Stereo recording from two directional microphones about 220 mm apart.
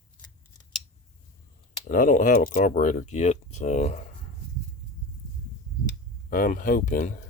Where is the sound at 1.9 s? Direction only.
40° left (ahead or behind).